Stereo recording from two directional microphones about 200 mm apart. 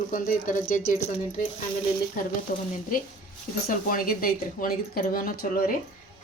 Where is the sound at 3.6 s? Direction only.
45° left (ahead or behind).